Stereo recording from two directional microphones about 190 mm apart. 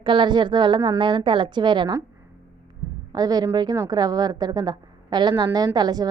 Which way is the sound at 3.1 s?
20° right (ahead or behind).